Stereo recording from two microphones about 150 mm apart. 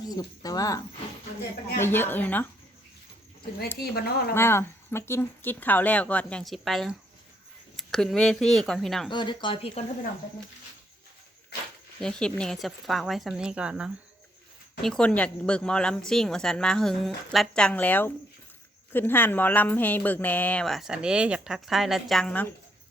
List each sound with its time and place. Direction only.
0.0 s speech: 25° left (ahead or behind)
1.8 s speech: 15° left (ahead or behind)
3.8 s a woman's voice: 90° left
4.4 s speech: 15° left (ahead or behind)
9.0 s speech: 30° left (ahead or behind)
11.5 s a sound: 90° left
11.9 s speech: 5° left (ahead or behind)